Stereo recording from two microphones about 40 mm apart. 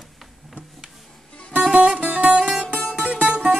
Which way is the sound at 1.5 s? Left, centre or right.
Right.